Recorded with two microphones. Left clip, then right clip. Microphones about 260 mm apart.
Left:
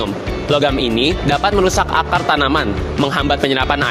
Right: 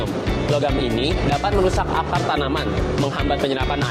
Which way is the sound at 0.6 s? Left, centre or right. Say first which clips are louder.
Left 6 dB; left.